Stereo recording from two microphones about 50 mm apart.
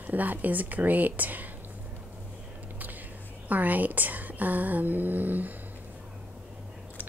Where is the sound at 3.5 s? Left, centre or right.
Right.